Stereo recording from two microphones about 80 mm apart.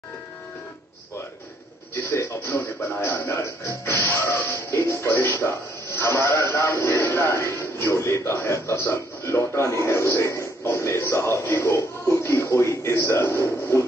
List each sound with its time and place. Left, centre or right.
2.0 s speech: left
13.1 s a man's voice: left
13.4 s speech: left